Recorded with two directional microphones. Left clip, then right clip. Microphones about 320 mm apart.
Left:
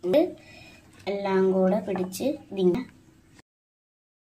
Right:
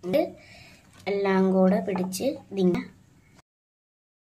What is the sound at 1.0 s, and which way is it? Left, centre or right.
A woman's voice, centre.